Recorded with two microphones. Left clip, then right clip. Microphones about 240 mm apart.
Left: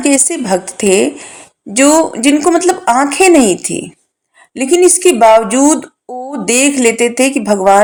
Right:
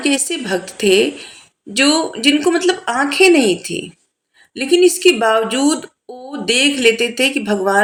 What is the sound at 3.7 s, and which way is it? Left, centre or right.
Speech, left.